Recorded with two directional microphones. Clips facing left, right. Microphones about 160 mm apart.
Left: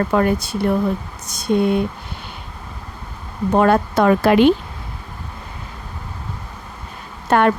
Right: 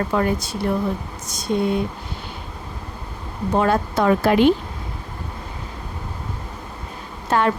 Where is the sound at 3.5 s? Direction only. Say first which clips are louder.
Left 4 dB; 60° left (ahead or behind).